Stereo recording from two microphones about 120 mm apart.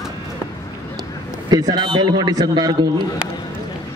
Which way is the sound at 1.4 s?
35° right (ahead or behind).